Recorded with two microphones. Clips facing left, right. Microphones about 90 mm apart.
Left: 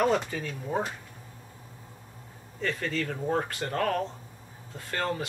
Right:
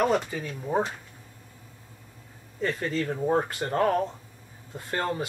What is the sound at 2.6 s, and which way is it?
Speech, 25° right (ahead or behind).